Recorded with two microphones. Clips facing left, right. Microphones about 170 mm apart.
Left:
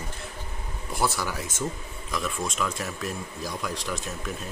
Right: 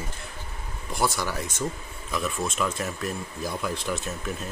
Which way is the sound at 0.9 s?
5° left (ahead or behind).